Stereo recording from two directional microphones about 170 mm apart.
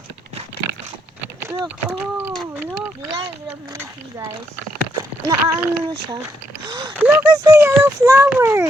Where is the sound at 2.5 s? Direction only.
10° right (ahead or behind).